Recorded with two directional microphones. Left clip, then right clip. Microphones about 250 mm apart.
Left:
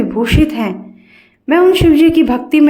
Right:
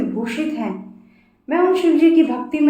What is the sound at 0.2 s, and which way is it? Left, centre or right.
A woman's voice, left.